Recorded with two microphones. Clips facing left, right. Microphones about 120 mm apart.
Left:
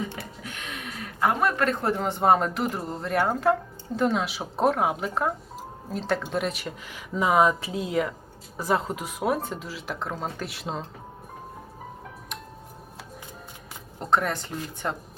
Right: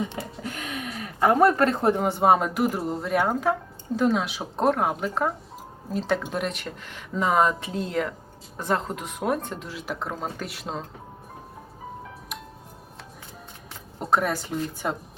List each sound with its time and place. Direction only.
0.0 s a sound: 20° right (ahead or behind)
1.3 s speech: 40° right (ahead or behind)
1.8 s speech: 15° right (ahead or behind); by 10.8 s centre (ahead or behind)
14.0 s speech: 10° right (ahead or behind)